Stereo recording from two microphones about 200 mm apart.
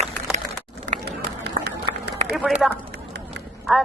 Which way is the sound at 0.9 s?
45° right (ahead or behind).